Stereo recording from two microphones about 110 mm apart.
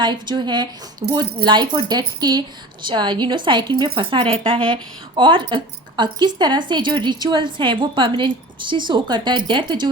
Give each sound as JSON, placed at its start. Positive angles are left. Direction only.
{"t": 0.0, "sound": "a woman's voice", "side_deg": -45}